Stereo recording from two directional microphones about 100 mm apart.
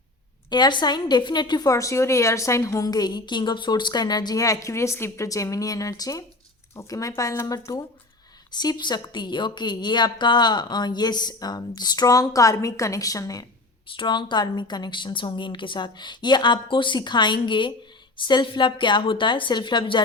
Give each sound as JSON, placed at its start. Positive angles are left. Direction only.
{"t": 0.5, "sound": "a woman's voice", "side_deg": 45}
{"t": 1.6, "sound": "a woman's voice", "side_deg": 30}
{"t": 13.9, "sound": "a woman's voice", "side_deg": 55}